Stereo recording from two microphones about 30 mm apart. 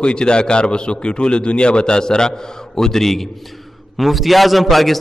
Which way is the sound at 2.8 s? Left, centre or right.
Centre.